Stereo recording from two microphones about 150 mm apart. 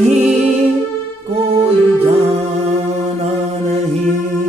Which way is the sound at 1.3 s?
40° right (ahead or behind).